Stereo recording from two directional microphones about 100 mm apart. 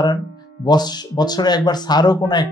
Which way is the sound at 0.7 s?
45° left (ahead or behind).